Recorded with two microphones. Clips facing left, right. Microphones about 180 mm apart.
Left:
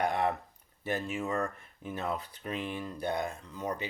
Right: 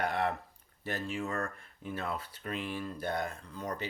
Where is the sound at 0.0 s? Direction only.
15° left (ahead or behind).